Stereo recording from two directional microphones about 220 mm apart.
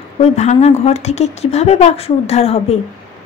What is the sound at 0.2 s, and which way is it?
A woman's voice, 30° left (ahead or behind).